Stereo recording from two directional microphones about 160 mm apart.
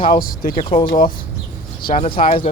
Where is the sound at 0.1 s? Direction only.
60° left (ahead or behind).